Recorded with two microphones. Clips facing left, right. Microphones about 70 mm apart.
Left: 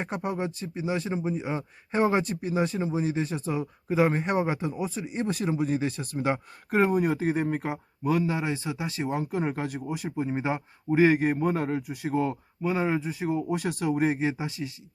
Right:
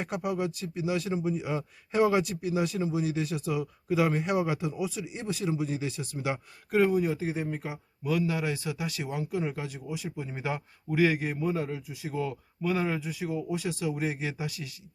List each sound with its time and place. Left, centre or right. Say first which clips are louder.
0.0 s speech: even; left
10.2 s speech: left 5 dB; left
12.6 s speech: left 3 dB; left